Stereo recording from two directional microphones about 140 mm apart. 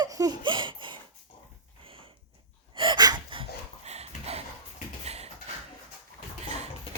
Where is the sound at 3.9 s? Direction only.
50° right (ahead or behind).